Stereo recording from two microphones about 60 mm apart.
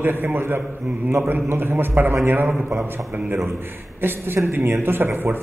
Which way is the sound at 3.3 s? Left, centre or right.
Right.